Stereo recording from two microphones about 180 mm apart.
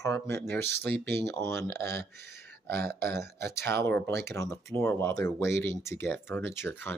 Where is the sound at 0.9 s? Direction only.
65° right (ahead or behind).